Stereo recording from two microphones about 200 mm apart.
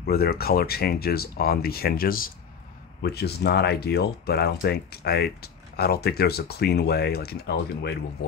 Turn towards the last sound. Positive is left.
turn(degrees=55)  # may be behind; listen again after turning